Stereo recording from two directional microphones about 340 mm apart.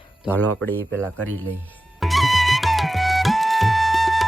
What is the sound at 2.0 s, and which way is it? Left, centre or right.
Flute, centre.